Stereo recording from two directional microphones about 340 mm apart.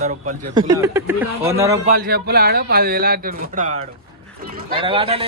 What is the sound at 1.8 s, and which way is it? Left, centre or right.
Speech, right.